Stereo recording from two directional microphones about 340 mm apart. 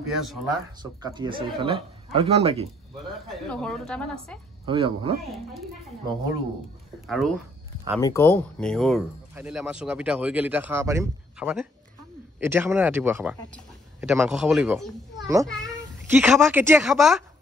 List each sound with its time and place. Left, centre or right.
0.1 s speech: centre
1.0 s speech: centre
3.3 s speech: centre
4.6 s speech: centre
7.1 s a child's voice: centre